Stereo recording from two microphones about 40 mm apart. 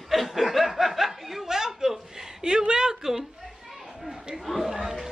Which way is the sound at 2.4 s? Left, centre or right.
Centre.